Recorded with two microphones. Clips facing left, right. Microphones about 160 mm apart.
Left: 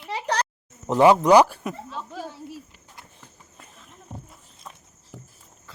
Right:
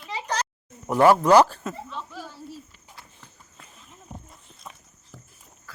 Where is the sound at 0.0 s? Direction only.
65° left (ahead or behind).